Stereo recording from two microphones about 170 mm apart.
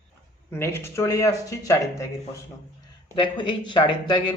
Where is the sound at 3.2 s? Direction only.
30° left (ahead or behind).